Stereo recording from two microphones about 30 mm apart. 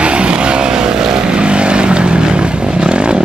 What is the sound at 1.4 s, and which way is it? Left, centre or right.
Vehicle, right.